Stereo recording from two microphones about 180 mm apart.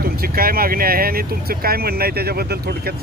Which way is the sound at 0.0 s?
55° right (ahead or behind).